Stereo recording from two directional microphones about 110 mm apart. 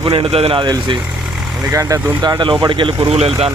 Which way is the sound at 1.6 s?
30° right (ahead or behind).